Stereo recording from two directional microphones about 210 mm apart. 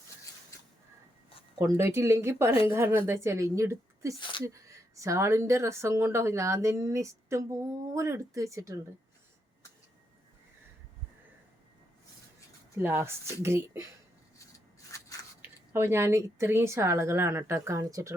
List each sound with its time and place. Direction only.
1.5 s a woman's voice: 15° right (ahead or behind)
4.2 s speech: 20° left (ahead or behind)
4.4 s a woman's voice: 15° right (ahead or behind)
12.7 s a woman's voice: 10° right (ahead or behind)
14.9 s scissors: 15° left (ahead or behind)
15.4 s a woman's voice: 10° right (ahead or behind)